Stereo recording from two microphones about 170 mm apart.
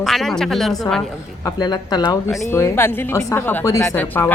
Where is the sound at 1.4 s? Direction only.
25° left (ahead or behind).